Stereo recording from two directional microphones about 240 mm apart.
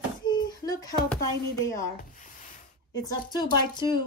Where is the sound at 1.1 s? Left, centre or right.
Centre.